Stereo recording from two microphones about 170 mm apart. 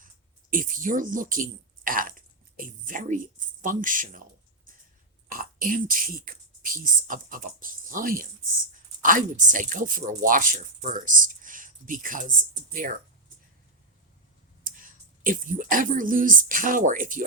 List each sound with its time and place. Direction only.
0.5 s speech: 55° right (ahead or behind)
5.3 s speech: 55° right (ahead or behind)
14.6 s speech: 55° right (ahead or behind)